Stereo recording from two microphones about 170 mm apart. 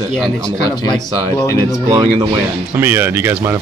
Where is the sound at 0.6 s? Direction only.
25° left (ahead or behind).